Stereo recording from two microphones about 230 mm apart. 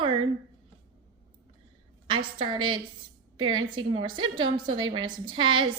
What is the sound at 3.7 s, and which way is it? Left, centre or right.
A woman's voice, centre.